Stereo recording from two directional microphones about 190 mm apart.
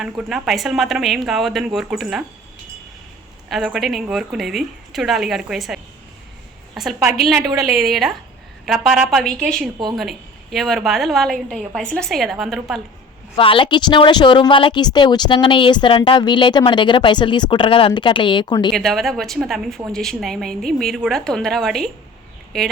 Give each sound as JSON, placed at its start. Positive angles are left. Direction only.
{"t": 0.0, "sound": "speech", "side_deg": -5}
{"t": 3.5, "sound": "speech", "side_deg": 0}
{"t": 7.3, "sound": "a woman's voice", "side_deg": -20}
{"t": 7.8, "sound": "speech", "side_deg": 0}
{"t": 13.3, "sound": "a woman's voice", "side_deg": 25}
{"t": 18.7, "sound": "speech", "side_deg": 0}